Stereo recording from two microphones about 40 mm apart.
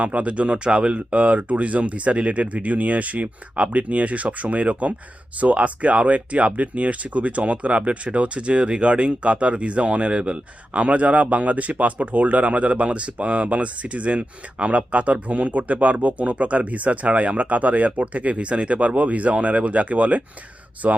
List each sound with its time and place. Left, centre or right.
0.0 s speech: right